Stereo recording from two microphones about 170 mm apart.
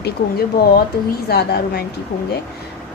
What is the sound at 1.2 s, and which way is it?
Speech, 70° left (ahead or behind).